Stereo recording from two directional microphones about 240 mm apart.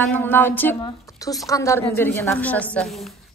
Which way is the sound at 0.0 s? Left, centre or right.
Centre.